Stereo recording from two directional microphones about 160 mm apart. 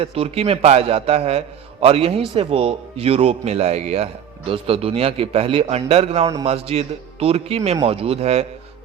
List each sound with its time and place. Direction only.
0.0 s speech: 40° right (ahead or behind)